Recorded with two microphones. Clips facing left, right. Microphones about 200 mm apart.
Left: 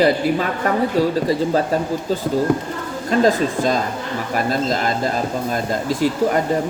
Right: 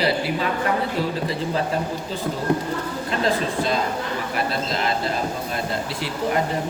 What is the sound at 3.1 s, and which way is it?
A man's voice, 45° left (ahead or behind).